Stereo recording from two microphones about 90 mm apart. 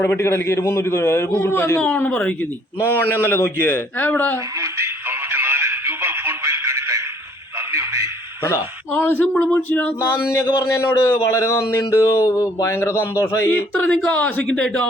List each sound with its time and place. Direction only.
0.0 s a man's voice: 25° left (ahead or behind)
2.0 s speech: 15° left (ahead or behind)
2.8 s a man's voice: 25° left (ahead or behind)
5.3 s a sound: 25° right (ahead or behind)
8.9 s a man's voice: 20° left (ahead or behind)
9.3 s speech: 10° left (ahead or behind)
9.6 s a man's voice: 20° left (ahead or behind)